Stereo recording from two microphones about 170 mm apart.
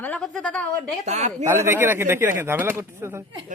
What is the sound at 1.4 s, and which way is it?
A man's voice, 15° right (ahead or behind).